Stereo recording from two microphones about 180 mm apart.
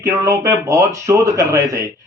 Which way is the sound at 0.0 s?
20° right (ahead or behind).